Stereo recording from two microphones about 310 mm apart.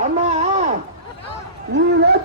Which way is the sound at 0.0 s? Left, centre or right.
Right.